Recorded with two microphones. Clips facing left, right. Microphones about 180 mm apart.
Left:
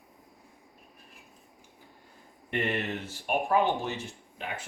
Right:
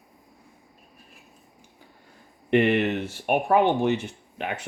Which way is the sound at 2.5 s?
75° right (ahead or behind).